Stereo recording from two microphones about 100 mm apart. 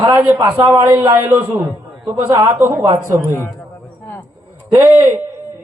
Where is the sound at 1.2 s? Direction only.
25° right (ahead or behind).